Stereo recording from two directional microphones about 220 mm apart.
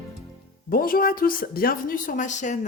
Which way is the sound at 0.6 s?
40° left (ahead or behind).